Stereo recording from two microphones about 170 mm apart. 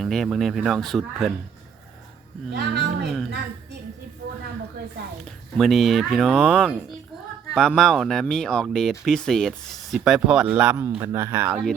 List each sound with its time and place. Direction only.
0.0 s speech: centre (ahead or behind)
2.5 s a woman's voice: 75° right (ahead or behind)
5.5 s speech: centre (ahead or behind)